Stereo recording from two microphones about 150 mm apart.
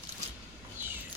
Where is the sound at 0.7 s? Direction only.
15° right (ahead or behind).